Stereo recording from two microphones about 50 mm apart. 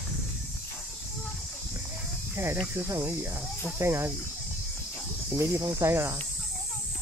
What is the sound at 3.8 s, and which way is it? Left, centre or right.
Speech, right.